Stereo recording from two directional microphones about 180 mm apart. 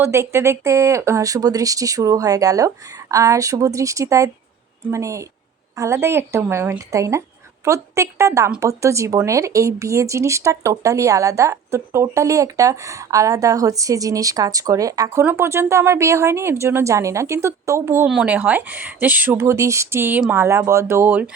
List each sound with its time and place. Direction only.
0.0 s speech: 15° right (ahead or behind)